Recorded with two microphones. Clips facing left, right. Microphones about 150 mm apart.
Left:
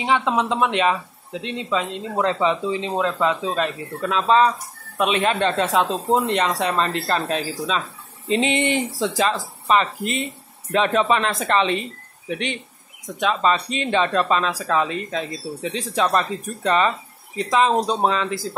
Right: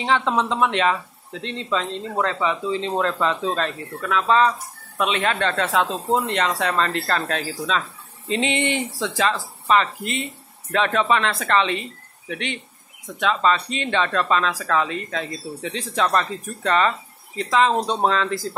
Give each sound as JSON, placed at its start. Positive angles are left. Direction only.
{"t": 0.0, "sound": "speech", "side_deg": 10}
{"t": 4.0, "sound": "speech", "side_deg": 25}
{"t": 8.5, "sound": "speech", "side_deg": 35}
{"t": 9.0, "sound": "speech", "side_deg": 15}